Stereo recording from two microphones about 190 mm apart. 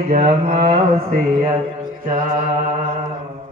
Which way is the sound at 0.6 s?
45° right (ahead or behind).